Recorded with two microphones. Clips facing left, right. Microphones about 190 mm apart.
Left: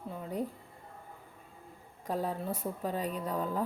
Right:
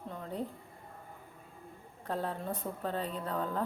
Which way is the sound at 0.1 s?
10° left (ahead or behind).